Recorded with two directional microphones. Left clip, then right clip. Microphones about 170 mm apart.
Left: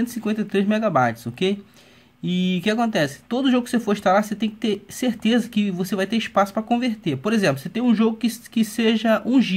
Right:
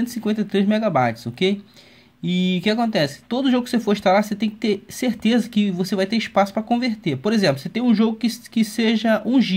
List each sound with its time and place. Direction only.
0.2 s speech: 20° right (ahead or behind)